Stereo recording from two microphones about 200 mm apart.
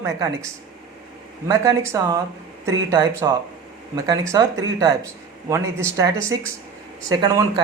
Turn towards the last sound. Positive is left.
turn(degrees=-15)  # may be behind; listen again after turning